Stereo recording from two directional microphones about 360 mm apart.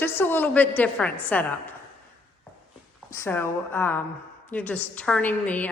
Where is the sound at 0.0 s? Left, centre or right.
Centre.